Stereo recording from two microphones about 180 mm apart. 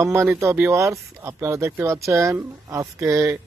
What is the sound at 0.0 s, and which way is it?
Speech, 15° right (ahead or behind).